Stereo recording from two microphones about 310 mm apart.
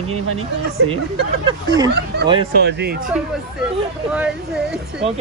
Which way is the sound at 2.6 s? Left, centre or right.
Right.